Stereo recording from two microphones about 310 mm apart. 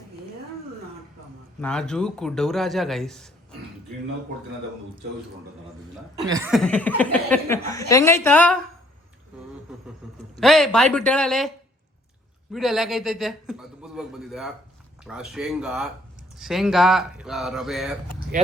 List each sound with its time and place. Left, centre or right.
1.6 s speech: centre
6.1 s speech: centre
10.0 s a sound: centre
10.4 s speech: centre
18.3 s speech: right